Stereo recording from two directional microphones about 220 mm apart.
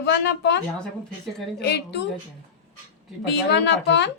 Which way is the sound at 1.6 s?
50° left (ahead or behind).